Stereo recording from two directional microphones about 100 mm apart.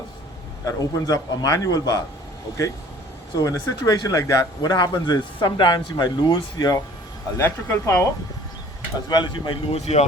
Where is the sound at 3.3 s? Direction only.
35° left (ahead or behind).